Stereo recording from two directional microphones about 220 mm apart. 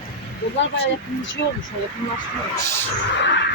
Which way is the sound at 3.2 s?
55° left (ahead or behind).